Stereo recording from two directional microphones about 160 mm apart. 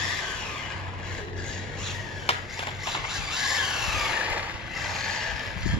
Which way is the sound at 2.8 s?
5° right (ahead or behind).